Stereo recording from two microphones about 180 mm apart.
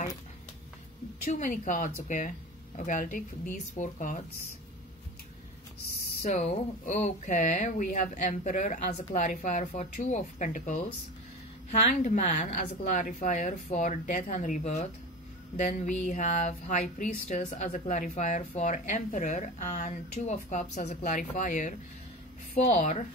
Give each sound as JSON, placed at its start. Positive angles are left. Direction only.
{"t": 1.2, "sound": "speech", "side_deg": 45}
{"t": 6.2, "sound": "speech", "side_deg": 40}